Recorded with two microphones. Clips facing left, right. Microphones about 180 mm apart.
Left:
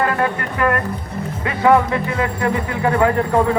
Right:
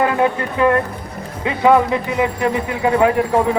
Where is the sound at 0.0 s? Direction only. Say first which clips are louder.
Right 3 dB; 20° right (ahead or behind).